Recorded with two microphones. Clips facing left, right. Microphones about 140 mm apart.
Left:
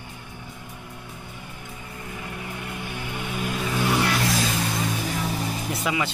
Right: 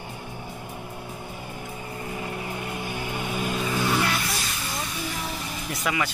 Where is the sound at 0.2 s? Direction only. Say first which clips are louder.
Right 4 dB; 40° right (ahead or behind).